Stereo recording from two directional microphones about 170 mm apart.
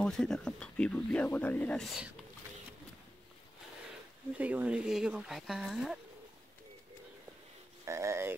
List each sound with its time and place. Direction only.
0.0 s speech: 5° left (ahead or behind)
4.4 s speech: 10° right (ahead or behind)
7.8 s speech: 15° right (ahead or behind)